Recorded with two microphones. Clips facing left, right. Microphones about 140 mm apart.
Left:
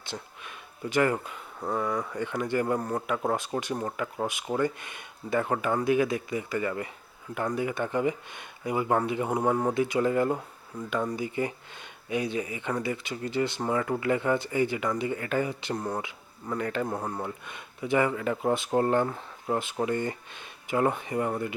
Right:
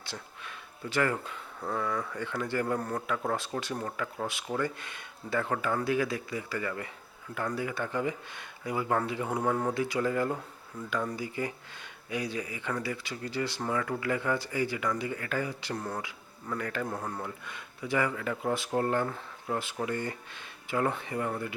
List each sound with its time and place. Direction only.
0.0 s speech: 20° left (ahead or behind)